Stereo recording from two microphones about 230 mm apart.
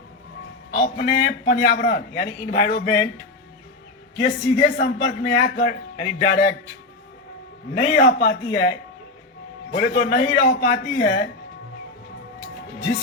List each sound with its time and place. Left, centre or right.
0.7 s a man's voice: left
4.2 s a man's voice: left
7.8 s a man's voice: left
9.7 s a man's voice: left